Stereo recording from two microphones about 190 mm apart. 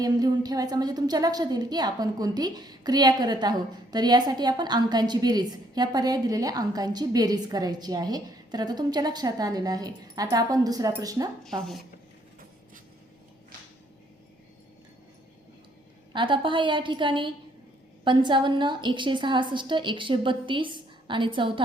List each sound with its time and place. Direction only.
0.0 s a woman's voice: 20° right (ahead or behind)
16.1 s a woman's voice: 25° right (ahead or behind)